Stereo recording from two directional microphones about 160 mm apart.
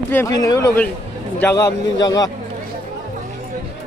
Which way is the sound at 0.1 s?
20° left (ahead or behind).